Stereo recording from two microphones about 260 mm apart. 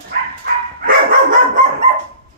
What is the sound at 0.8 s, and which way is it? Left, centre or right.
Dog, right.